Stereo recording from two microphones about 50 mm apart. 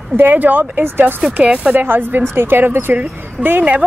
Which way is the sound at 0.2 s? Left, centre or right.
Right.